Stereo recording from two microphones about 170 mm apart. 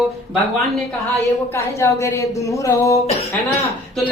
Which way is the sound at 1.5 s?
15° left (ahead or behind).